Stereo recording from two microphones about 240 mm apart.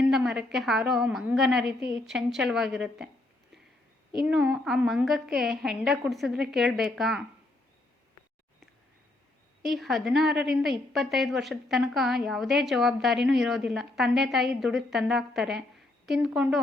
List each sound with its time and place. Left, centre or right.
0.1 s a woman's voice: centre
4.2 s a woman's voice: centre
9.6 s a woman's voice: centre